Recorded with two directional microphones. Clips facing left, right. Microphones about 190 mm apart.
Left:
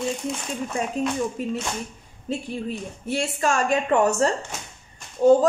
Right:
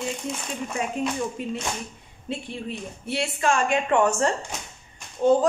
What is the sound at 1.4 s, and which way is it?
Speech, 40° left (ahead or behind).